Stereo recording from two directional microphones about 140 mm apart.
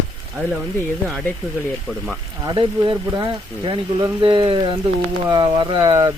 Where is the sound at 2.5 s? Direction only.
35° right (ahead or behind).